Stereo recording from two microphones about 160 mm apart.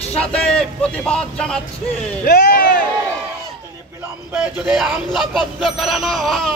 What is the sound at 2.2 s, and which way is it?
Speech, 65° left (ahead or behind).